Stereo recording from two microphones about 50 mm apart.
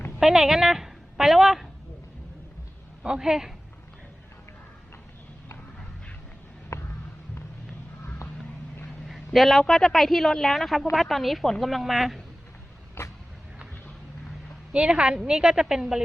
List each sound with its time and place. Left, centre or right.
0.2 s a woman's voice: centre
3.0 s a woman's voice: centre
6.7 s a sound: left
9.0 s a man's voice: centre
13.0 s vehicle: left
14.7 s a woman's voice: right